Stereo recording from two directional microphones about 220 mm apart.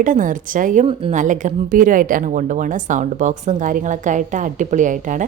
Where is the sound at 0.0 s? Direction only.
35° right (ahead or behind).